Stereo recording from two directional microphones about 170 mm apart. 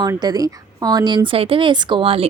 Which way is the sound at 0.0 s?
25° right (ahead or behind).